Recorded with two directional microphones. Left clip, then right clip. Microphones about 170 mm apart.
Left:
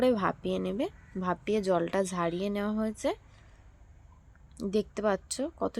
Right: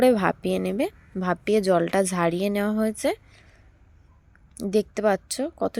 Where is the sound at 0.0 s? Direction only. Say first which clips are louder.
Right 7 dB; 25° right (ahead or behind).